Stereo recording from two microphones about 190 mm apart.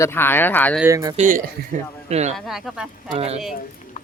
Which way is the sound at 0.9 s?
15° right (ahead or behind).